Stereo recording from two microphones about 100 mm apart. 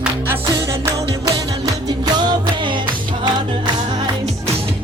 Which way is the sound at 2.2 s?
50° right (ahead or behind).